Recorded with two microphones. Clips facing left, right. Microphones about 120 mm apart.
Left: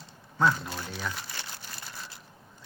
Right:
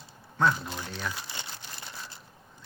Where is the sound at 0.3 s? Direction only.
Centre (ahead or behind).